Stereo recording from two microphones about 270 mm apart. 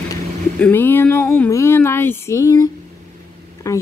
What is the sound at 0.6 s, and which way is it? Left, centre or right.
Speech, centre.